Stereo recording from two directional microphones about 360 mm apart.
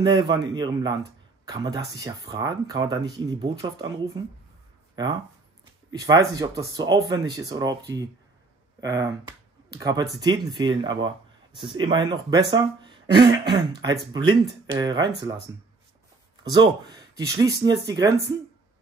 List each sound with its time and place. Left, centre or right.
0.0 s speech: centre
6.6 s speech: right
6.9 s speech: centre
15.0 s speech: right
16.4 s speech: centre